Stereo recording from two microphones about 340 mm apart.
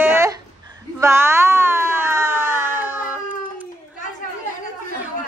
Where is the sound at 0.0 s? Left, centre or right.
Centre.